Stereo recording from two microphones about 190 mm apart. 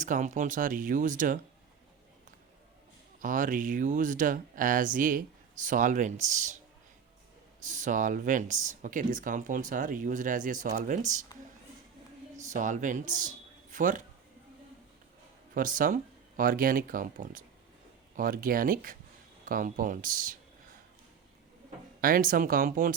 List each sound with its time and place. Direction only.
0.0 s speech: 40° right (ahead or behind)
3.2 s speech: 45° right (ahead or behind)
7.6 s speech: 40° right (ahead or behind)
12.4 s a man's voice: 40° right (ahead or behind)
15.5 s speech: 45° right (ahead or behind)
22.0 s speech: 45° right (ahead or behind)